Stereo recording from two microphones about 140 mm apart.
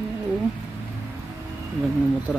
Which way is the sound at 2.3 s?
Centre (ahead or behind).